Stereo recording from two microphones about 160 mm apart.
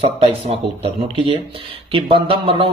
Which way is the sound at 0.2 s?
40° right (ahead or behind).